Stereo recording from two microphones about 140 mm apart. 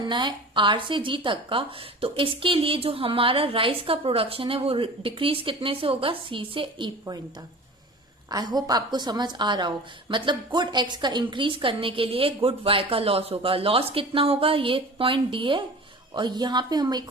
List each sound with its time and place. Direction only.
0.1 s a woman's voice: 35° right (ahead or behind)
8.3 s a woman's voice: 30° right (ahead or behind)